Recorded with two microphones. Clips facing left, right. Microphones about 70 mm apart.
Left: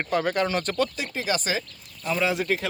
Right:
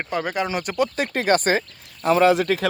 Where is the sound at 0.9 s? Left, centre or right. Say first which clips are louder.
Right 8 dB; right.